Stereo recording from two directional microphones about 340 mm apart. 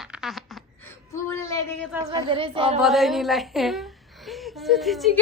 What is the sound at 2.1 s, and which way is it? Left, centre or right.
Speech, centre.